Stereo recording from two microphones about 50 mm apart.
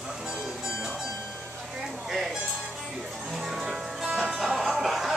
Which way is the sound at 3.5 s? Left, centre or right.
Centre.